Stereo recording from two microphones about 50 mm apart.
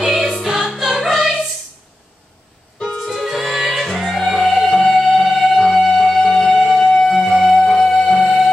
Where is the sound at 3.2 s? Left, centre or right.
Centre.